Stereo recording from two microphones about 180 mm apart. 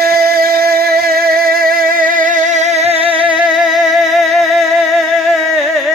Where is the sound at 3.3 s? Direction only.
Centre (ahead or behind).